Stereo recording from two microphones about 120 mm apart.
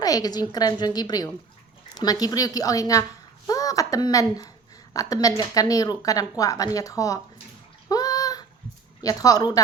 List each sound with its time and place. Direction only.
0.0 s a woman's voice: 30° left (ahead or behind)
7.9 s a sound: 30° left (ahead or behind)
9.0 s a woman's voice: 30° left (ahead or behind)